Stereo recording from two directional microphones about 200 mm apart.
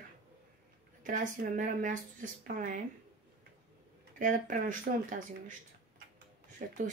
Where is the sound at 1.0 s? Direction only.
40° right (ahead or behind).